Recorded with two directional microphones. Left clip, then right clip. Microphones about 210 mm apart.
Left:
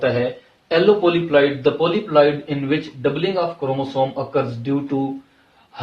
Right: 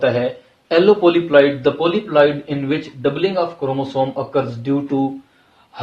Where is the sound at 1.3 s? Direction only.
35° right (ahead or behind).